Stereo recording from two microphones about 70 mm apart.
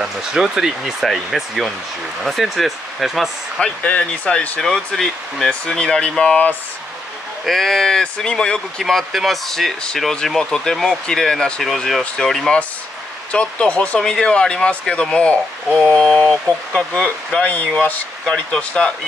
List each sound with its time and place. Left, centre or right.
0.0 s speech: centre
3.6 s speech: left
4.6 s speech: centre
7.4 s speech: centre
8.8 s speech: centre; by 18.0 s left
18.2 s speech: centre